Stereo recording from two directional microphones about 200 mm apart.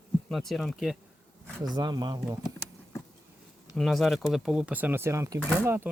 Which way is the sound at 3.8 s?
Centre (ahead or behind).